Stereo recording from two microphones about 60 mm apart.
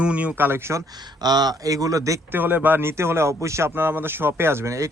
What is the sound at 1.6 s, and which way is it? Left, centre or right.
Speech, right.